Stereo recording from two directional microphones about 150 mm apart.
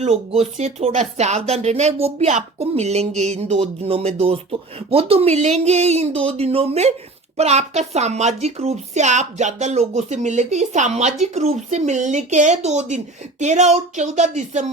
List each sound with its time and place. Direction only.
0.0 s speech: 45° right (ahead or behind)